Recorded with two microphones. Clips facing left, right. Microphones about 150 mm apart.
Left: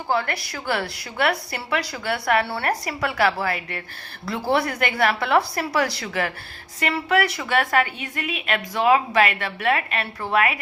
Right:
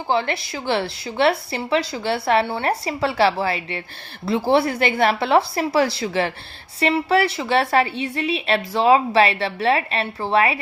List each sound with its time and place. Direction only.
0.1 s a woman's voice: 25° right (ahead or behind)